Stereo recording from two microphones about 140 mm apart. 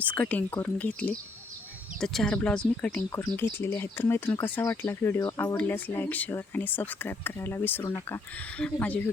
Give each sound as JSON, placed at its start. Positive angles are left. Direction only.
{"t": 0.0, "sound": "speech", "side_deg": 10}